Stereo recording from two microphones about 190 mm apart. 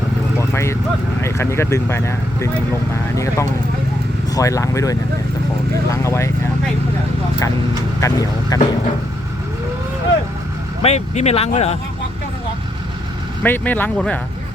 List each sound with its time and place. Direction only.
0.3 s vehicle: 15° left (ahead or behind)
1.2 s speech: 15° left (ahead or behind)
8.0 s speech: 20° left (ahead or behind)
10.8 s speech: 35° left (ahead or behind)
13.4 s speech: 10° left (ahead or behind)